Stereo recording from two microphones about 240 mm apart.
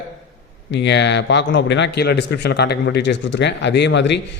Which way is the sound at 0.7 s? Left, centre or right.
Left.